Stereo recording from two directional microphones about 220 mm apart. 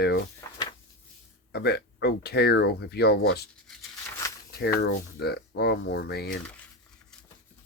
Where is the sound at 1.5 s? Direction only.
50° left (ahead or behind).